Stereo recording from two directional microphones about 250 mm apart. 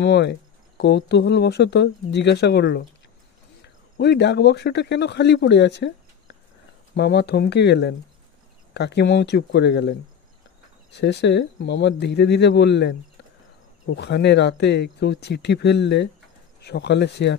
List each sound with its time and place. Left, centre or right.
0.0 s speech: left
13.9 s speech: left